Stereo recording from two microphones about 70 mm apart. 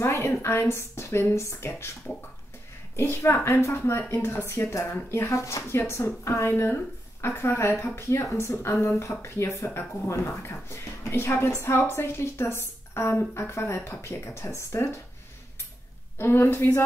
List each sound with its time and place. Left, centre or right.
0.0 s speech: left
3.0 s speech: left
16.2 s speech: left